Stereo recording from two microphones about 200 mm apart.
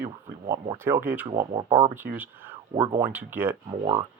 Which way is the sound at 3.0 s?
10° right (ahead or behind).